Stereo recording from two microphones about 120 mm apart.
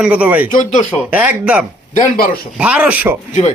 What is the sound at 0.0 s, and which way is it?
A man's voice, 10° right (ahead or behind).